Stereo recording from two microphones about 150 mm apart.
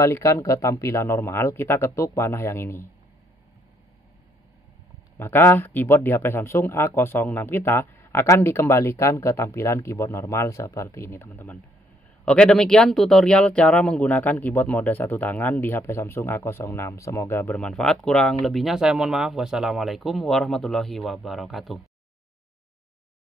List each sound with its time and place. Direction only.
0.0 s speech: 20° left (ahead or behind)
5.1 s speech: 15° left (ahead or behind)
12.3 s speech: 5° left (ahead or behind)
17.6 s speech: centre (ahead or behind)